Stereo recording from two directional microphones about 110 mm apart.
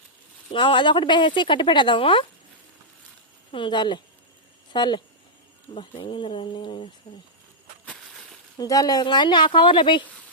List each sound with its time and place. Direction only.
0.5 s speech: 50° left (ahead or behind)
3.5 s speech: 45° left (ahead or behind)
5.7 s speech: 55° left (ahead or behind)
7.1 s speech: 65° left (ahead or behind)
7.9 s a sound: 5° left (ahead or behind)
8.5 s speech: 35° left (ahead or behind)